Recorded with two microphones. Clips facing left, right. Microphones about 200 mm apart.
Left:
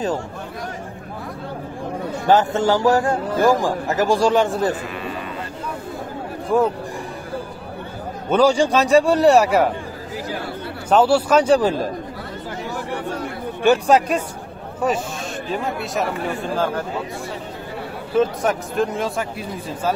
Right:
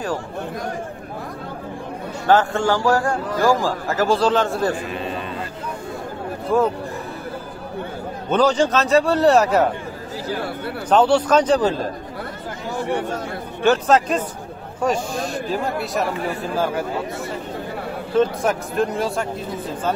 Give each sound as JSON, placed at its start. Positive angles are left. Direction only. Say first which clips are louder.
{"t": 2.2, "sound": "a man's voice", "louder": "left 1 dB", "side_deg": 20}
{"t": 6.5, "sound": "a man's voice", "louder": "left 1 dB", "side_deg": 15}
{"t": 8.3, "sound": "a man's voice", "louder": "left 2 dB", "side_deg": 10}
{"t": 10.9, "sound": "a man's voice", "louder": "even", "side_deg": 5}
{"t": 13.6, "sound": "speech", "louder": "left 1 dB", "side_deg": 15}
{"t": 18.1, "sound": "speech", "louder": "even", "side_deg": 0}